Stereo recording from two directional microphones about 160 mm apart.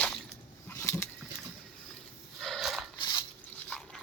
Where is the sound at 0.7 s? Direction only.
15° left (ahead or behind).